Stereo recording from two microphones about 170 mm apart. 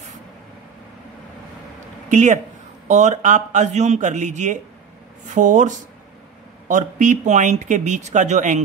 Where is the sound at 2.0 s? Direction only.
45° right (ahead or behind).